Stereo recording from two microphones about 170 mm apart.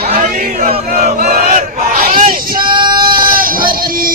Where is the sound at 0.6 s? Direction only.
50° right (ahead or behind).